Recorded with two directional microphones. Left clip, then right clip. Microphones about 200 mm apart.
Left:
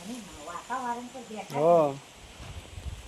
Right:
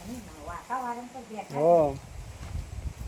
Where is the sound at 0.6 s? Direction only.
35° left (ahead or behind).